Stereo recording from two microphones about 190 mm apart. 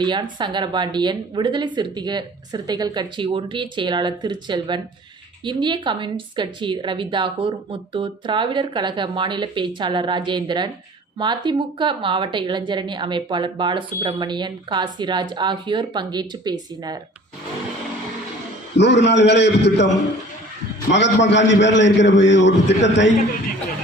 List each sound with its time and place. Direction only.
0.0 s a woman's voice: 25° right (ahead or behind)
18.8 s a man's voice: 65° left (ahead or behind)
20.9 s a man's voice: 65° left (ahead or behind)